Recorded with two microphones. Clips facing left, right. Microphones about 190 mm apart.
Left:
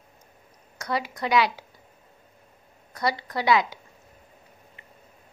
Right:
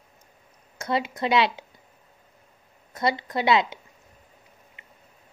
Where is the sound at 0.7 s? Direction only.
25° right (ahead or behind).